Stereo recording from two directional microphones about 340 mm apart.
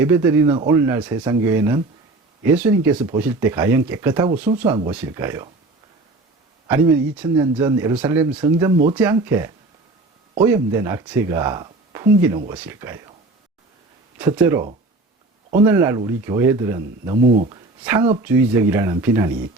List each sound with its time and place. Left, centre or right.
0.0 s speech: centre
6.7 s speech: centre
14.2 s speech: centre
17.2 s speech: right
17.8 s speech: centre